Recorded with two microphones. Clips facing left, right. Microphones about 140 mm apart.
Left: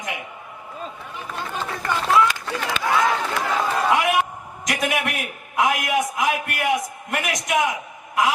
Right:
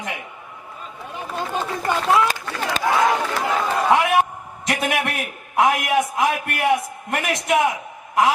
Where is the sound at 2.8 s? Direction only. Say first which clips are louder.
Right 5 dB; 40° right (ahead or behind).